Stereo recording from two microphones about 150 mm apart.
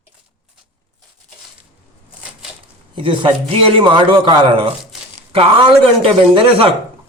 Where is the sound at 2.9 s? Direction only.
35° right (ahead or behind).